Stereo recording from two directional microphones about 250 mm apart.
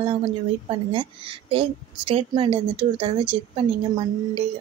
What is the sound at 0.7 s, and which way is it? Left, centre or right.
Speech, centre.